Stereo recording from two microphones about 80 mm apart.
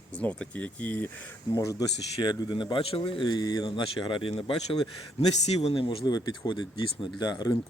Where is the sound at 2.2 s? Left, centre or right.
Left.